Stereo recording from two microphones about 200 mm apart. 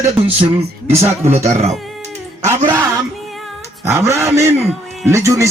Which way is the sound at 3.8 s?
15° right (ahead or behind).